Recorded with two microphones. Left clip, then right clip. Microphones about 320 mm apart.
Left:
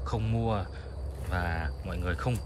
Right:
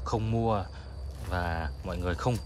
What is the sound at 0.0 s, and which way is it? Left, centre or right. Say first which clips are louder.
Speech: right 3 dB; centre.